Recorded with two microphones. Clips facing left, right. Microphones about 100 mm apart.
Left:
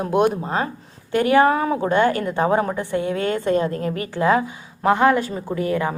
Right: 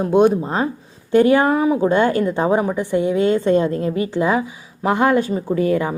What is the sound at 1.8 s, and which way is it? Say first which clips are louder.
A woman's voice: right 3 dB; 20° right (ahead or behind).